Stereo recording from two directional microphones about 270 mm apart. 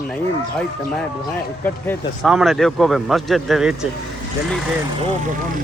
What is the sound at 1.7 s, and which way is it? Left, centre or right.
Speech, centre.